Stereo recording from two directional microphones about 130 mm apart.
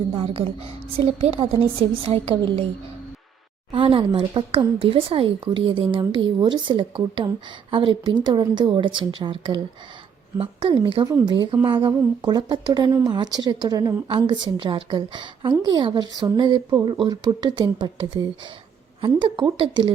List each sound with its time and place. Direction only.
0.1 s a woman's voice: 45° right (ahead or behind)
3.7 s a woman's voice: 45° right (ahead or behind)